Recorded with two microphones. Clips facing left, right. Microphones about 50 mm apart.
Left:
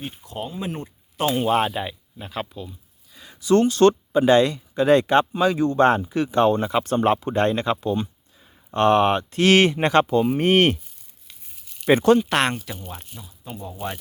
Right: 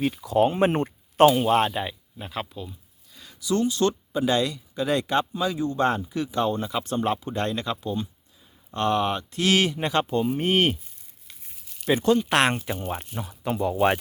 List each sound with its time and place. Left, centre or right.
0.0 s speech: right
0.7 s speech: right
1.4 s speech: centre
3.4 s speech: left
5.3 s speech: left
7.8 s speech: left
8.7 s speech: left
9.7 s speech: left
11.9 s speech: left
12.3 s speech: centre
13.1 s speech: right